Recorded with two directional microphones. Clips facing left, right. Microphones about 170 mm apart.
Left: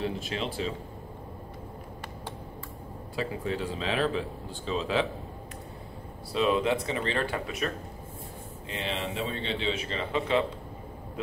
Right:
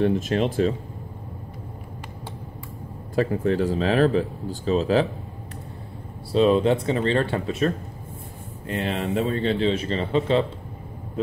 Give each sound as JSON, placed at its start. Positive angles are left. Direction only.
{"t": 0.0, "sound": "speech", "side_deg": -50}
{"t": 3.2, "sound": "speech", "side_deg": -50}
{"t": 6.3, "sound": "speech", "side_deg": -35}
{"t": 8.6, "sound": "speech", "side_deg": -55}